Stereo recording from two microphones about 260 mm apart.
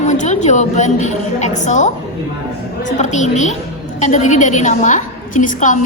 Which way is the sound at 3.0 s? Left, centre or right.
Left.